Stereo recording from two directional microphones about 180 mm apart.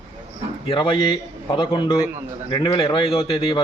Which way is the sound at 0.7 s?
25° left (ahead or behind).